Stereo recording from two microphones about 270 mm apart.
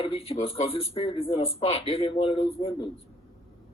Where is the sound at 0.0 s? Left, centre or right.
Left.